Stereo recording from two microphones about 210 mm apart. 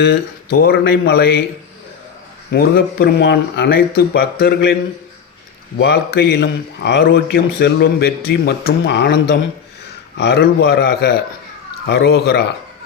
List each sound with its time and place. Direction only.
0.0 s a man's voice: 50° left (ahead or behind)
2.5 s a man's voice: 45° left (ahead or behind)
9.8 s a sound: 55° left (ahead or behind)
10.7 s a man's voice: 50° left (ahead or behind)